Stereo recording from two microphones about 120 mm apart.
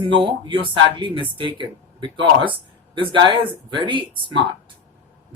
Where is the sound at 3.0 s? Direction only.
45° right (ahead or behind).